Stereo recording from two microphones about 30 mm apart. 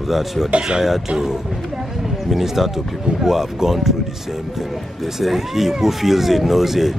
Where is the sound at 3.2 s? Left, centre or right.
Centre.